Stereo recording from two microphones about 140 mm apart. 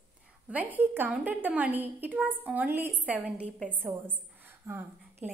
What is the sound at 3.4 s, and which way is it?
Speech, 10° left (ahead or behind).